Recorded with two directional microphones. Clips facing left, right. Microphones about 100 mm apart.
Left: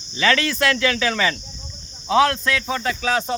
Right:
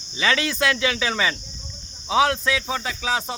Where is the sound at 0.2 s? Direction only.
15° right (ahead or behind).